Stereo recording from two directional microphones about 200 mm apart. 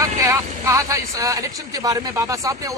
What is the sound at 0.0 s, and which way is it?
Speech, 15° right (ahead or behind).